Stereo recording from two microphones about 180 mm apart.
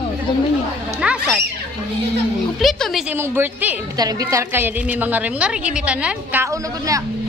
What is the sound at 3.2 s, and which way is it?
A woman's voice, 15° right (ahead or behind).